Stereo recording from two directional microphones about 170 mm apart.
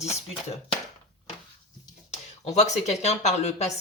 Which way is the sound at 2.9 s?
40° left (ahead or behind).